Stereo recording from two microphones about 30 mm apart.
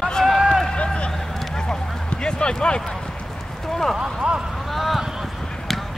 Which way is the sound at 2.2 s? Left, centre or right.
Left.